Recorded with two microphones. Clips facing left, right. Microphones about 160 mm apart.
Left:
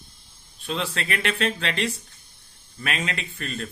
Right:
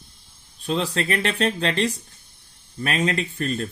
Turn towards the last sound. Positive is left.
turn(degrees=-35)  # may be behind; listen again after turning